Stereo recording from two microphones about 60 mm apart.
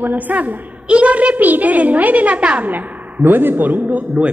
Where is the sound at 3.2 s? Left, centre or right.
Right.